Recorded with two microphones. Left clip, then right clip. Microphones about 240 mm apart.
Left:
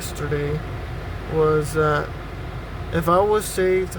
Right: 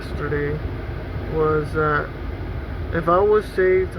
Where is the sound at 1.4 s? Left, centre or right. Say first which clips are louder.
Left 1 dB; centre.